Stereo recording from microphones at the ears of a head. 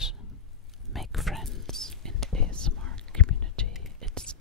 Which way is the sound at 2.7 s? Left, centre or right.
Left.